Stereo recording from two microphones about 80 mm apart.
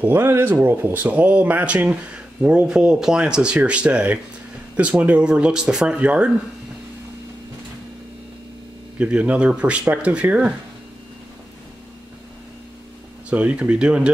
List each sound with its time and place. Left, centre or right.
0.0 s speech: right
8.9 s speech: centre
13.3 s speech: centre